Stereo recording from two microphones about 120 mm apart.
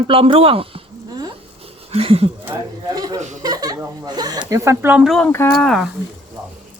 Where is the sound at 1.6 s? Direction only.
55° right (ahead or behind).